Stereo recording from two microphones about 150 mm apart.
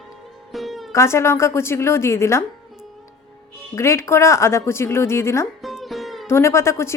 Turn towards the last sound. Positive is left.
turn(degrees=20)  # may be behind; listen again after turning